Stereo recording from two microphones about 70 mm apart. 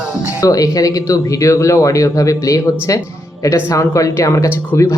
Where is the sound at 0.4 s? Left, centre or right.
Left.